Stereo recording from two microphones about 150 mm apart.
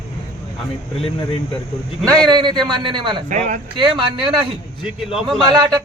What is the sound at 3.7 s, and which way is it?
Speech, 30° right (ahead or behind).